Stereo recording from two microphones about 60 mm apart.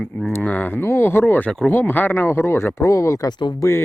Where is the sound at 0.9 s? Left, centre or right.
Left.